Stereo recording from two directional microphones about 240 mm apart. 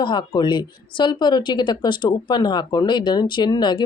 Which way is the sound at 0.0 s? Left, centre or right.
Centre.